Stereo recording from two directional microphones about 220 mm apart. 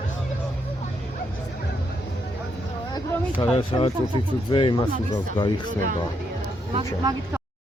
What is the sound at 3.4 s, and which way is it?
Speech, 25° left (ahead or behind).